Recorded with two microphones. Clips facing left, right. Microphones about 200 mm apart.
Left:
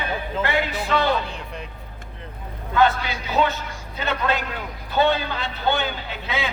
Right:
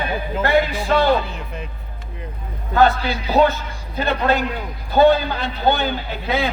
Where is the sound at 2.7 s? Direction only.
35° right (ahead or behind).